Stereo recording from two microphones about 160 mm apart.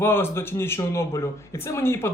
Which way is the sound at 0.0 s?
15° left (ahead or behind).